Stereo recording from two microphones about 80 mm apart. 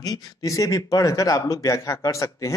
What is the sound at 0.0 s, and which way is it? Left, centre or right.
A man's voice, left.